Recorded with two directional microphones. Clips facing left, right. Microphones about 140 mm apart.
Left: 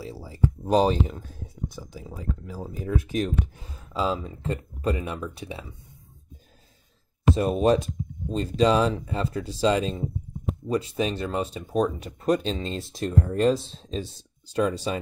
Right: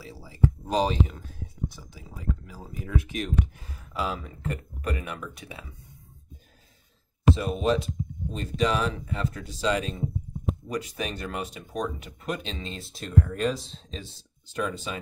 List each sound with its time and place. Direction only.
0.0 s speech: 35° left (ahead or behind)
2.5 s speech: 40° left (ahead or behind)
3.9 s speech: 25° left (ahead or behind)
7.3 s speech: 45° left (ahead or behind)
8.3 s speech: 30° left (ahead or behind)